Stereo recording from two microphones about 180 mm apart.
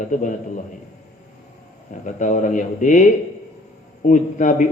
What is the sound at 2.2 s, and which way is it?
Speech, 45° left (ahead or behind).